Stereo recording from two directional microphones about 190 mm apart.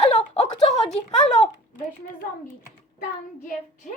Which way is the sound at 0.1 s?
35° left (ahead or behind).